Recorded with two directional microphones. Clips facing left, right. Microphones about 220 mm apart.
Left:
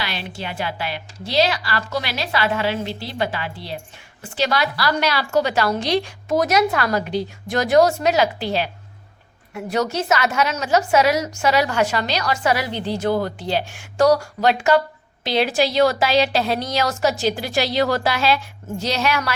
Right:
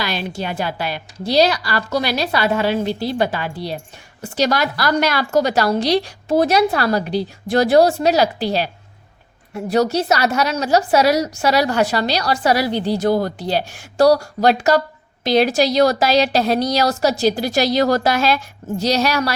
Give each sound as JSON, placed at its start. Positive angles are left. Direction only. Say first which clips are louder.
{"t": 0.0, "sound": "a woman's voice", "louder": "right 5 dB", "side_deg": -40}